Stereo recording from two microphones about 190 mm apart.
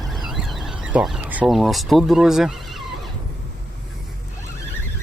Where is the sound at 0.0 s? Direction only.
Centre (ahead or behind).